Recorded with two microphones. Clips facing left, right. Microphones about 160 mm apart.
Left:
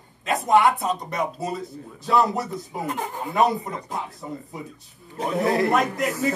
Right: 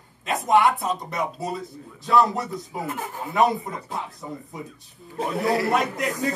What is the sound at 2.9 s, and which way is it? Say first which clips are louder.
Speech: left 2 dB; 20° left (ahead or behind).